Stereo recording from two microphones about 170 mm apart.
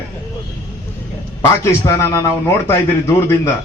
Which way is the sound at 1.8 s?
20° left (ahead or behind).